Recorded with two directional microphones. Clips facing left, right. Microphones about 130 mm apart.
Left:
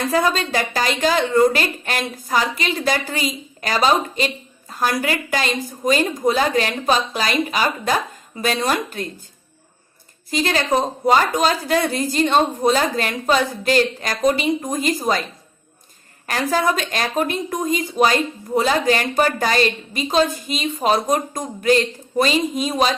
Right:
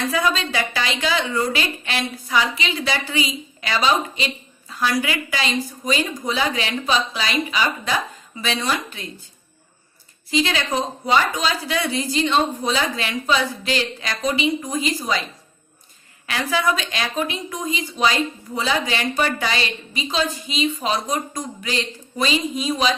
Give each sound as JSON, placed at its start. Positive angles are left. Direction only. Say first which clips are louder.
{"t": 0.0, "sound": "a woman's voice", "louder": "left 3 dB", "side_deg": 45}
{"t": 10.2, "sound": "a woman's voice", "louder": "left 2 dB", "side_deg": 45}
{"t": 16.2, "sound": "a woman's voice", "louder": "left 2 dB", "side_deg": 45}